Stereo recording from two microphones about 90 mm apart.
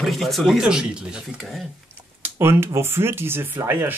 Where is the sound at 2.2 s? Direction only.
25° right (ahead or behind).